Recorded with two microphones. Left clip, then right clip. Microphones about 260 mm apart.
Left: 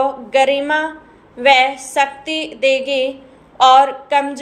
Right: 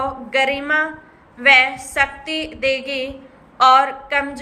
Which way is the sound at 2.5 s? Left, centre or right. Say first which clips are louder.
Left 6 dB; centre.